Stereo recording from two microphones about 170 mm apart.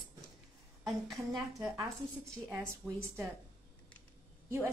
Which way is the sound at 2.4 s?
15° right (ahead or behind).